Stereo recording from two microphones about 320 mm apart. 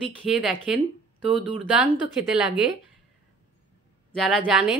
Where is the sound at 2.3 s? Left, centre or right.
Centre.